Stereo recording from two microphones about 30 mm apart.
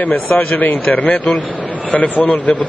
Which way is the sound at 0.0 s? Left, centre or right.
Left.